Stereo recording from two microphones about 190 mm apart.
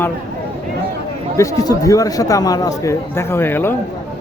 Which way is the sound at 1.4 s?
15° left (ahead or behind).